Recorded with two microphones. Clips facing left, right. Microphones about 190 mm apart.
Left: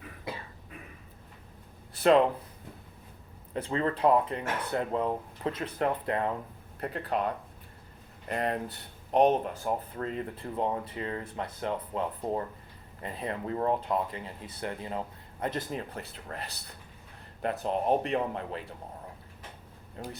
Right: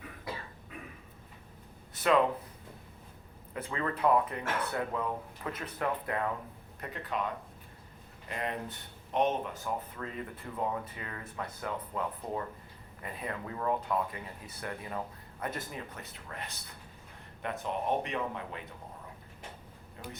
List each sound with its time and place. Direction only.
3.5 s speech: 30° left (ahead or behind)
8.4 s speech: 35° left (ahead or behind)